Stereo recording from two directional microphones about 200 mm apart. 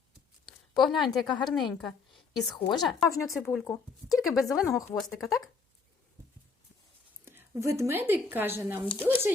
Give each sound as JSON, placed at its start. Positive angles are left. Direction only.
{"t": 0.4, "sound": "a woman's voice", "side_deg": 5}
{"t": 4.1, "sound": "speech", "side_deg": 15}
{"t": 4.9, "sound": "speech", "side_deg": 0}
{"t": 7.3, "sound": "a woman's voice", "side_deg": -15}